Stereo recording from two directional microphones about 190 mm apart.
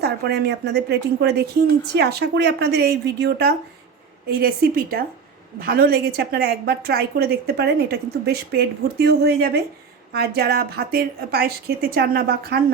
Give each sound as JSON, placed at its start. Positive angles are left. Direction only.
{"t": 0.0, "sound": "a woman's voice", "side_deg": -60}